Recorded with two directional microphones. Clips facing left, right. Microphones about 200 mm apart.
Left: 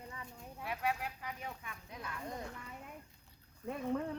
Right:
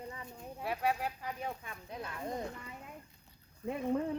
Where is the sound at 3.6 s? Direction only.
15° right (ahead or behind).